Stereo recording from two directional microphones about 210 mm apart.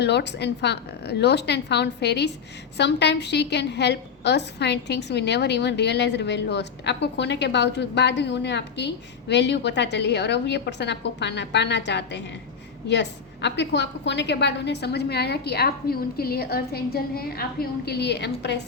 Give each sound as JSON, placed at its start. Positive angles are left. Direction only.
{"t": 0.0, "sound": "a woman's voice", "side_deg": 55}